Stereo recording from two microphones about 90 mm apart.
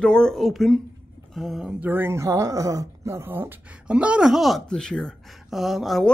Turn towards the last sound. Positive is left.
turn(degrees=0)  # may be behind; listen again after turning